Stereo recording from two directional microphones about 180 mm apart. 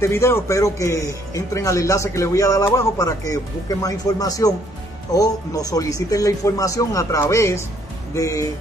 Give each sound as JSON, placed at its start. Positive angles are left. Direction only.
{"t": 0.0, "sound": "speech", "side_deg": 15}